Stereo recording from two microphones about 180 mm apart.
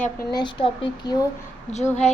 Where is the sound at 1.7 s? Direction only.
40° left (ahead or behind).